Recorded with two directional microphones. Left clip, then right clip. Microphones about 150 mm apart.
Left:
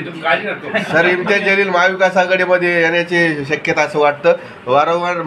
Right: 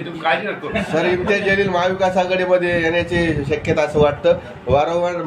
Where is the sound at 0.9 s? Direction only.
25° left (ahead or behind).